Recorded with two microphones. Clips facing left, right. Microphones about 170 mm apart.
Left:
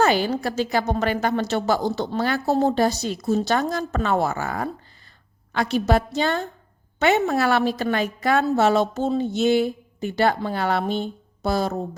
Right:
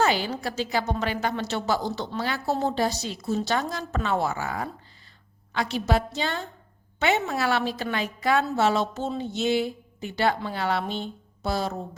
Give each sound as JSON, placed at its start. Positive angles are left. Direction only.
{"t": 0.0, "sound": "a woman's voice", "side_deg": 50}